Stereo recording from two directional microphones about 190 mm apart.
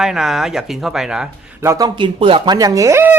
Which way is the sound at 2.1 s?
30° right (ahead or behind).